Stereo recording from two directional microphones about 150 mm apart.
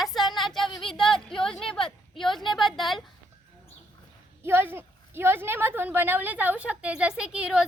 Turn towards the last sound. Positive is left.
turn(degrees=-5)  # may be behind; listen again after turning